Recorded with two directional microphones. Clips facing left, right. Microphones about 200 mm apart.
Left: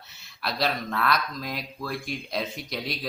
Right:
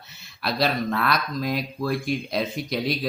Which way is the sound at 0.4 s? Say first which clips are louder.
Right 4 dB; 5° right (ahead or behind).